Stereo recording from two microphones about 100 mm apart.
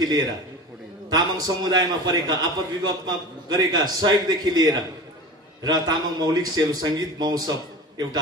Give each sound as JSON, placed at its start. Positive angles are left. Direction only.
{"t": 0.0, "sound": "a man's voice", "side_deg": -45}